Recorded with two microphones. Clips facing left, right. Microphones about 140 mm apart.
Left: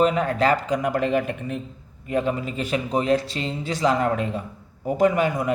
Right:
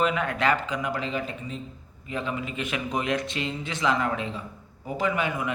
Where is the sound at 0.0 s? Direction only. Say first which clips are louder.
Left 5 dB; 35° left (ahead or behind); by 1.6 s 60° left (ahead or behind).